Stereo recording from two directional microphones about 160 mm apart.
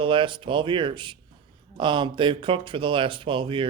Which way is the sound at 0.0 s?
30° right (ahead or behind).